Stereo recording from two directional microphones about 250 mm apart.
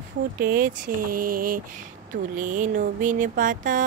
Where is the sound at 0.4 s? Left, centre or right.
Right.